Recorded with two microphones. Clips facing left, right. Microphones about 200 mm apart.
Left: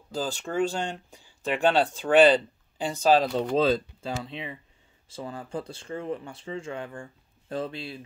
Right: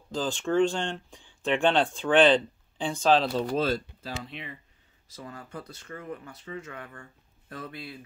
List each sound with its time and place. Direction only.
0.1 s speech: 10° left (ahead or behind)
3.7 s speech: 25° left (ahead or behind)